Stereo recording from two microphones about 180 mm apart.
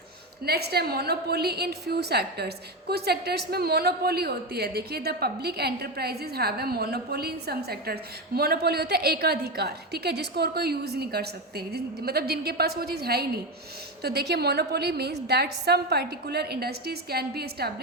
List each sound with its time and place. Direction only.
0.4 s a woman's voice: 60° right (ahead or behind)